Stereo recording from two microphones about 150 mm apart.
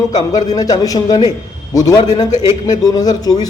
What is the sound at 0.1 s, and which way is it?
Speech, 25° left (ahead or behind).